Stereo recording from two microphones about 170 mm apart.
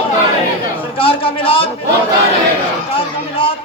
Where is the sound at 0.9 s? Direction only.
30° left (ahead or behind).